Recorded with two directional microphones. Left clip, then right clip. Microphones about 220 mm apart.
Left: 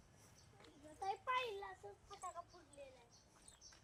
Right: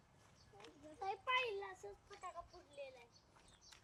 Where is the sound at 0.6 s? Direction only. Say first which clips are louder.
Even; 25° right (ahead or behind).